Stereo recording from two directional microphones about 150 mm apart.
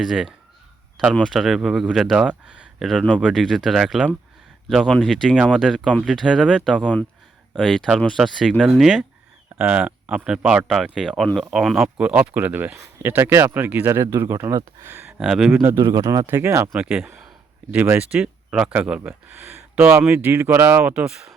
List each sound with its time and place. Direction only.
0.0 s speech: centre (ahead or behind)
9.6 s speech: 10° right (ahead or behind)
15.2 s speech: 5° right (ahead or behind)
15.6 s speech: 20° right (ahead or behind)
16.6 s speech: 5° right (ahead or behind)